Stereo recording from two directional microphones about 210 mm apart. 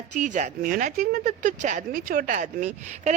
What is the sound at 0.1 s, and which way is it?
Speech, 35° right (ahead or behind).